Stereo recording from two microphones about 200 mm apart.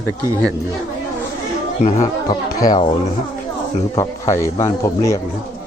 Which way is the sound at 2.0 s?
20° left (ahead or behind).